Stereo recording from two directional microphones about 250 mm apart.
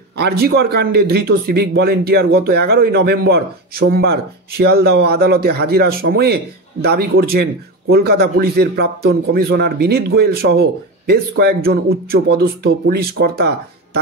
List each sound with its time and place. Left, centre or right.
0.2 s speech: right